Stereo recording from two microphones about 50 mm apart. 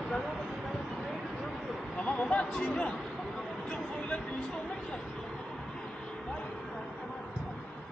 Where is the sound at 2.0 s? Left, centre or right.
Left.